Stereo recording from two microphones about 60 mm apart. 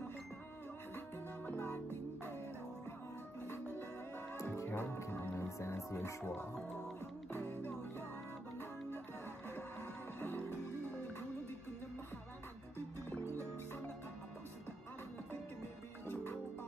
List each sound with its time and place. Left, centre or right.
0.9 s music: left
4.4 s music: left
4.6 s music: left
5.9 s speech: left
7.3 s music: left
9.6 s music: left
13.1 s music: left